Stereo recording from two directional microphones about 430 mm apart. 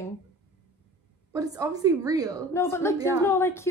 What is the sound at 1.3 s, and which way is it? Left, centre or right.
A woman's voice, centre.